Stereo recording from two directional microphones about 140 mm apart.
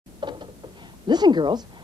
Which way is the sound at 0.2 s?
35° right (ahead or behind).